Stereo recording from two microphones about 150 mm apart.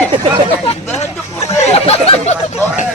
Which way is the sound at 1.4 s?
45° left (ahead or behind).